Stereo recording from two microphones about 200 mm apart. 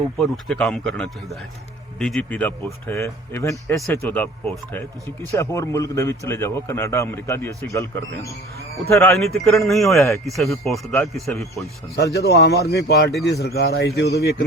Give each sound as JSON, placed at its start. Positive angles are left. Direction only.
{"t": 0.2, "sound": "a man's voice", "side_deg": 0}
{"t": 9.1, "sound": "a man's voice", "side_deg": 0}
{"t": 11.9, "sound": "a man's voice", "side_deg": 55}